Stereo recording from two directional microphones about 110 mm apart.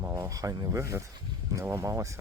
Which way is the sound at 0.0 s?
20° right (ahead or behind).